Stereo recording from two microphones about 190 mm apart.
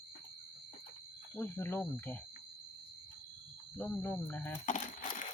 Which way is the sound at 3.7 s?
10° left (ahead or behind).